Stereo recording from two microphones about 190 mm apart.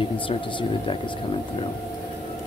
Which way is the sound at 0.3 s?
25° left (ahead or behind).